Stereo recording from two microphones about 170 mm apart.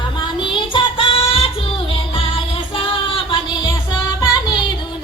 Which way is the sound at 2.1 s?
30° left (ahead or behind).